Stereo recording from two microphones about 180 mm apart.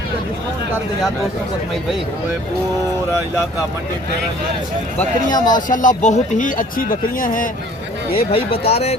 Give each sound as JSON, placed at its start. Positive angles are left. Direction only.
{"t": 5.3, "sound": "speech", "side_deg": 25}
{"t": 5.6, "sound": "speech", "side_deg": 45}
{"t": 8.1, "sound": "speech", "side_deg": 30}